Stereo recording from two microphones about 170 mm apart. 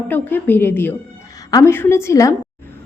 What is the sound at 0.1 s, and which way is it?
A woman's voice, 10° left (ahead or behind).